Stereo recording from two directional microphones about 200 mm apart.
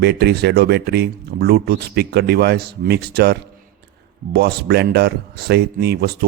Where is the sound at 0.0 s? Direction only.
55° right (ahead or behind).